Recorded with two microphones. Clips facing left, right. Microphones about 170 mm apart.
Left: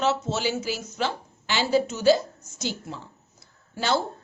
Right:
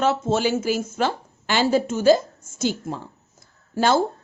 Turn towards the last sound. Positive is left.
turn(degrees=-45)  # may be behind; listen again after turning